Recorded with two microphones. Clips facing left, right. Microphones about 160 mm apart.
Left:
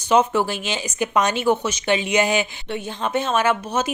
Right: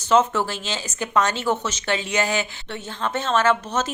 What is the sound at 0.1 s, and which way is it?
Speech, 15° left (ahead or behind).